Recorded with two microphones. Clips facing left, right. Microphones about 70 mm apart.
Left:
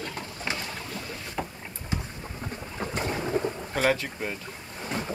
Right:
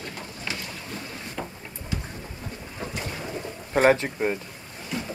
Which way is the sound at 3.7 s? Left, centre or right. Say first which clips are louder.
Right 7 dB; right.